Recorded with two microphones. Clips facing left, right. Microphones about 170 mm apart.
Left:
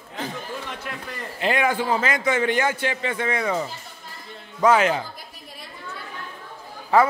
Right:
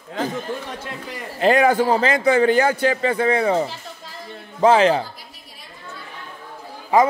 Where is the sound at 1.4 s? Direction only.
40° right (ahead or behind).